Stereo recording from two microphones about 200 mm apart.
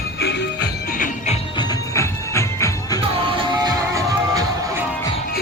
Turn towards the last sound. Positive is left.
turn(degrees=-15)  # may be behind; listen again after turning